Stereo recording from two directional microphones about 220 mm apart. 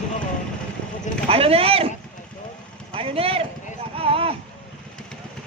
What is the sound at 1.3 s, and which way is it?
Speech, 25° right (ahead or behind).